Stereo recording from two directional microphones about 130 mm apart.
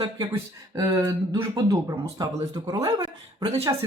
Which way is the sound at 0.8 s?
25° right (ahead or behind).